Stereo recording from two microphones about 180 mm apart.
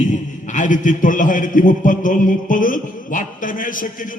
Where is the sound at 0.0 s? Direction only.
40° left (ahead or behind).